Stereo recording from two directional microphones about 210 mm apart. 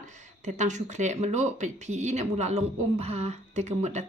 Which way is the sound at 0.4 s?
35° right (ahead or behind).